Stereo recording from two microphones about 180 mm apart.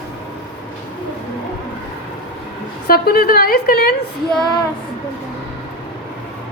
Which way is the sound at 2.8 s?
60° left (ahead or behind).